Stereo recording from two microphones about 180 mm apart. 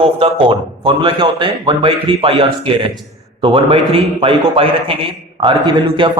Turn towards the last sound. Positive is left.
turn(degrees=-30)  # may be behind; listen again after turning